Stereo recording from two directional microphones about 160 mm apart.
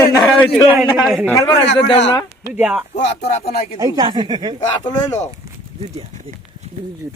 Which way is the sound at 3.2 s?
40° left (ahead or behind).